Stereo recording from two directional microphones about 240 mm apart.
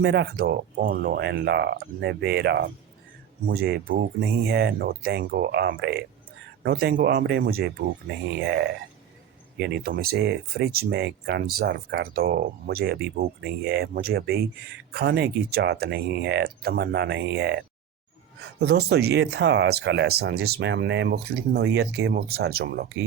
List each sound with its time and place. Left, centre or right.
0.0 s speech: right
18.6 s speech: right